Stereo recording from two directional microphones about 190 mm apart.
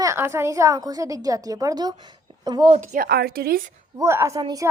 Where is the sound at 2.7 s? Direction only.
40° right (ahead or behind).